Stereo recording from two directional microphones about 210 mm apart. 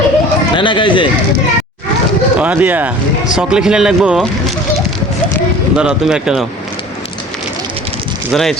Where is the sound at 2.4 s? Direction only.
5° right (ahead or behind).